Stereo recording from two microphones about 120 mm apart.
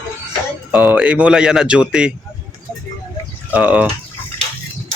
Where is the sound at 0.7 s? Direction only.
15° right (ahead or behind).